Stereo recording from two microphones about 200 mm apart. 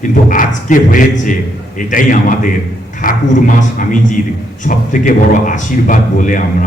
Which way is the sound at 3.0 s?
40° left (ahead or behind).